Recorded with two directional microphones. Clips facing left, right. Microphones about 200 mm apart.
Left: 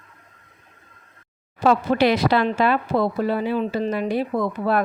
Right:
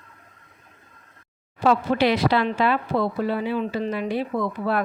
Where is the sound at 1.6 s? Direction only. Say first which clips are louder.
Left 2 dB; 45° left (ahead or behind).